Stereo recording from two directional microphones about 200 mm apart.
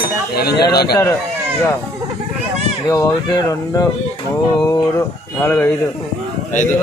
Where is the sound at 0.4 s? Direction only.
50° left (ahead or behind).